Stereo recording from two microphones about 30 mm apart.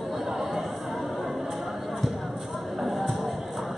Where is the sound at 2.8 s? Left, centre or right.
Centre.